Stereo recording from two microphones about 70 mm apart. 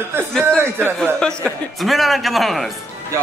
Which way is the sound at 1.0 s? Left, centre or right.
Centre.